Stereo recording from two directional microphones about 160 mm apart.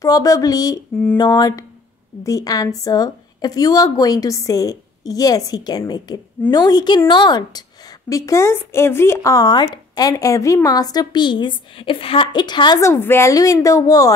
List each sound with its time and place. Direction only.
0.0 s a woman's voice: 20° left (ahead or behind)